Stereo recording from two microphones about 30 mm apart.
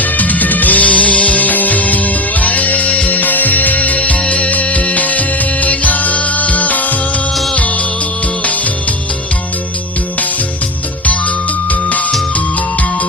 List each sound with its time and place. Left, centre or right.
0.0 s music: left
11.7 s music: left